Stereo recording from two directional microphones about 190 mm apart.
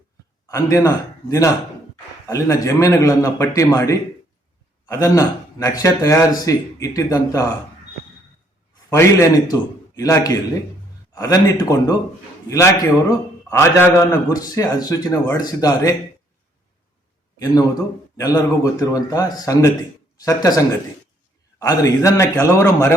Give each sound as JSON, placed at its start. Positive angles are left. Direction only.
{"t": 0.4, "sound": "a man's voice", "side_deg": 15}
{"t": 8.9, "sound": "a man's voice", "side_deg": 15}
{"t": 18.2, "sound": "a man's voice", "side_deg": 20}